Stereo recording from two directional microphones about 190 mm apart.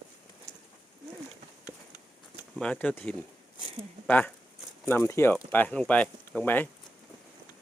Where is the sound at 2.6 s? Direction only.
5° left (ahead or behind).